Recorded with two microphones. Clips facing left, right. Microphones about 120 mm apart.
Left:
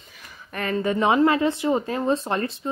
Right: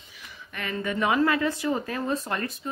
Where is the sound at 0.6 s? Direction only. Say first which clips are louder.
Left 5 dB; 35° left (ahead or behind).